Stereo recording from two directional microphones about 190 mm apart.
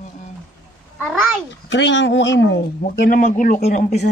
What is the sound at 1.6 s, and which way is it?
Speech, 75° left (ahead or behind).